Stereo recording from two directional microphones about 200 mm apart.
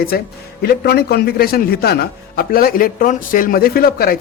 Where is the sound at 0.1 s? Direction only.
50° left (ahead or behind).